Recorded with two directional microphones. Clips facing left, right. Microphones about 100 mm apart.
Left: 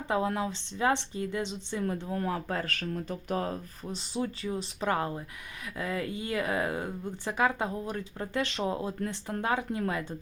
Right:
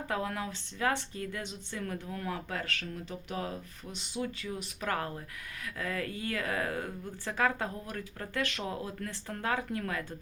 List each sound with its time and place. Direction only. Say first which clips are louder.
0.1 s speech: left 6 dB; 25° left (ahead or behind)